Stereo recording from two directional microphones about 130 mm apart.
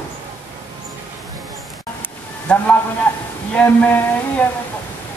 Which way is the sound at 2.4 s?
10° left (ahead or behind).